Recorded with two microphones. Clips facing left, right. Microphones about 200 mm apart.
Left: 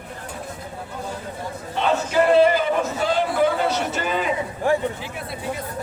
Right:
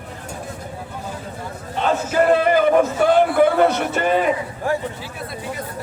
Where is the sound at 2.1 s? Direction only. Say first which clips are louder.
Even; 50° right (ahead or behind).